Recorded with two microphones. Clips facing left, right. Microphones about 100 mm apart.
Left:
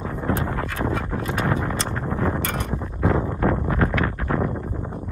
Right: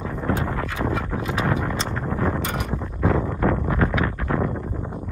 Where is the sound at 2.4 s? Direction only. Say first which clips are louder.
Even; 10° right (ahead or behind).